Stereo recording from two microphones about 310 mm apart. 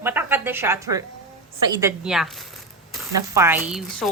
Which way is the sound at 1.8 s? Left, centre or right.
Centre.